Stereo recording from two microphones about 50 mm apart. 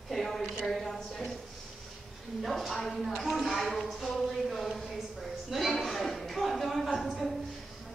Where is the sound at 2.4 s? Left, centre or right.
Centre.